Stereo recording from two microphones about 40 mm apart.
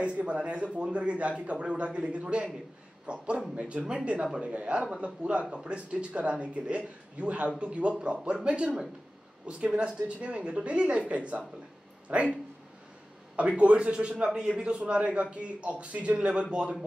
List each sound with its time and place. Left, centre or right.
0.0 s a man's voice: right
13.6 s a man's voice: right